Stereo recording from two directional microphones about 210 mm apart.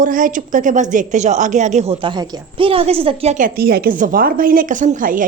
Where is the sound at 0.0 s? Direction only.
40° right (ahead or behind).